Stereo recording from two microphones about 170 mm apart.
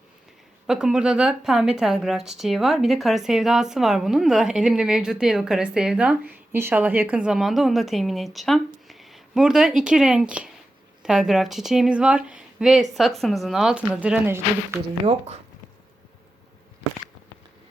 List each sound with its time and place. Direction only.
0.7 s a woman's voice: 5° right (ahead or behind)